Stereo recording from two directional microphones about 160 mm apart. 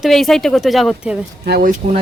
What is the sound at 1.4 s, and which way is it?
Speech, 75° right (ahead or behind).